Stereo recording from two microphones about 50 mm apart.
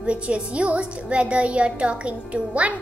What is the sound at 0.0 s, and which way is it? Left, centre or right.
A child's voice, right.